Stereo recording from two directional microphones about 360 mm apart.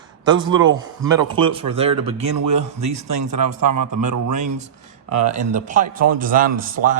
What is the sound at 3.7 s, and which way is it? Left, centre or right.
Speech, right.